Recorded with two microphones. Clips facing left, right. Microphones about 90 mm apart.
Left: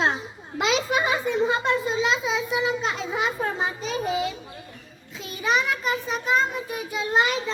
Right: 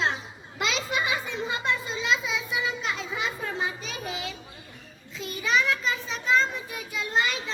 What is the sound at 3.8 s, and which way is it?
Speech, 30° left (ahead or behind).